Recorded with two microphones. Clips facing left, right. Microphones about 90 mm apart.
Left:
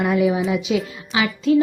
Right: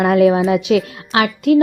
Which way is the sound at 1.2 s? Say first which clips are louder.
Right 4 dB; 60° right (ahead or behind).